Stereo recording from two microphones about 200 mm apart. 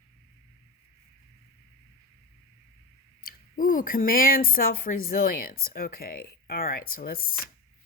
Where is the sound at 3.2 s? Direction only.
45° left (ahead or behind).